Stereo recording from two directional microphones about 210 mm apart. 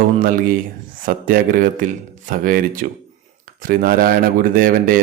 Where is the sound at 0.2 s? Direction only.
40° right (ahead or behind).